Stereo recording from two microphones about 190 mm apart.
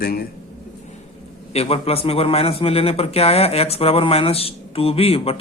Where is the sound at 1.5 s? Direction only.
30° left (ahead or behind).